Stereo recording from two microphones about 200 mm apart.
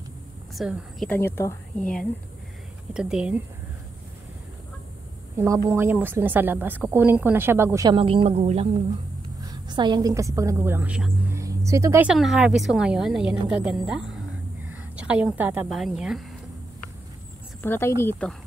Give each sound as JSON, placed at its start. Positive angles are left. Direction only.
{"t": 0.6, "sound": "a woman's voice", "side_deg": 0}
{"t": 5.4, "sound": "a woman's voice", "side_deg": -15}
{"t": 9.4, "sound": "a woman's voice", "side_deg": -20}
{"t": 12.1, "sound": "a woman's voice", "side_deg": 0}
{"t": 17.6, "sound": "a woman's voice", "side_deg": 10}